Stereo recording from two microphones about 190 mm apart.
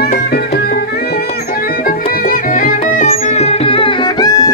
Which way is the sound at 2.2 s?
45° left (ahead or behind).